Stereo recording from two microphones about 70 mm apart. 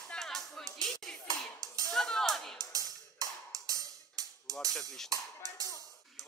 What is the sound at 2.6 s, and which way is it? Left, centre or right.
Music, right.